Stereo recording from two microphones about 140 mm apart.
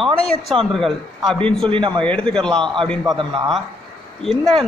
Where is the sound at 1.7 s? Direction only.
35° right (ahead or behind).